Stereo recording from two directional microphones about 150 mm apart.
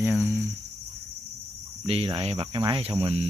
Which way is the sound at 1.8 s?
40° right (ahead or behind).